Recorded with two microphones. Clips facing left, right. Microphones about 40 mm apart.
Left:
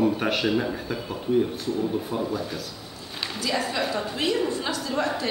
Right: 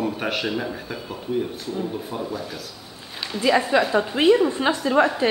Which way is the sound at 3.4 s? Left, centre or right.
Right.